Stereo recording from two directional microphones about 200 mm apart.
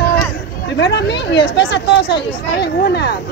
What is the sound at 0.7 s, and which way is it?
Speech, 60° left (ahead or behind).